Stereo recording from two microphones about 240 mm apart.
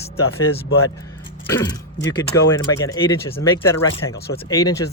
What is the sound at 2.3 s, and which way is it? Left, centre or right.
Speech, centre.